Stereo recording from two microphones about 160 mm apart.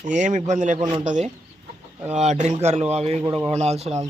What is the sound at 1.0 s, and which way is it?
Speech, 50° right (ahead or behind).